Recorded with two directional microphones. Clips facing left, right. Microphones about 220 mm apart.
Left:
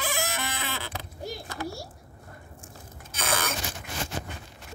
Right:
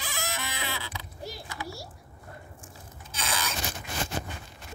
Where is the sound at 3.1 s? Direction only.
55° left (ahead or behind).